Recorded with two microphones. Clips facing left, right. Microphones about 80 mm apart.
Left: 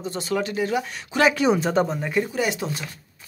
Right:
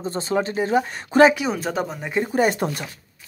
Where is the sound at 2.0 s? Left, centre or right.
Right.